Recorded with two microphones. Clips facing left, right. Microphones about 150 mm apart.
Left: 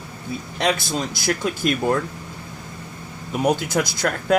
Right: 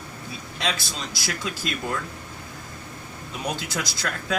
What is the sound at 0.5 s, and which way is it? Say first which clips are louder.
Speech: left 8 dB; 55° left (ahead or behind).